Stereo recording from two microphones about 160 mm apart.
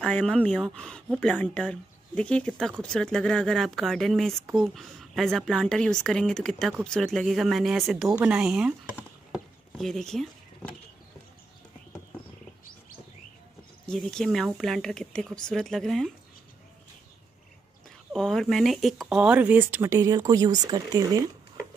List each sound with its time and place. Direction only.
0.0 s a woman's voice: 5° left (ahead or behind)
13.8 s a woman's voice: centre (ahead or behind)
18.1 s speech: 5° left (ahead or behind); by 21.3 s 25° right (ahead or behind)